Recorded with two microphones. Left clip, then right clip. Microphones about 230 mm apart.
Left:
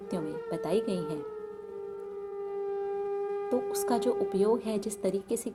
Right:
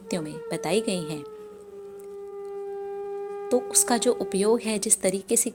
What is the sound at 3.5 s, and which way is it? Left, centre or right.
Speech, right.